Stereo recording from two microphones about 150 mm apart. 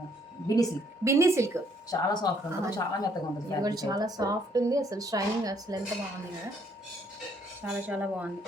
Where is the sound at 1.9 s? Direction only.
25° left (ahead or behind).